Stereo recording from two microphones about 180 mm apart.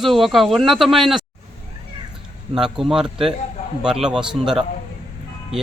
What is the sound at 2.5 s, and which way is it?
Speech, centre (ahead or behind).